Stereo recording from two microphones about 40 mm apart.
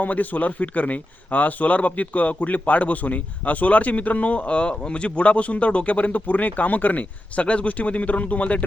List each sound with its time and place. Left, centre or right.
0.0 s speech: left